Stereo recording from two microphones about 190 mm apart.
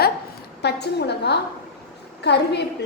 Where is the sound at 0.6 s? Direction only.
60° left (ahead or behind).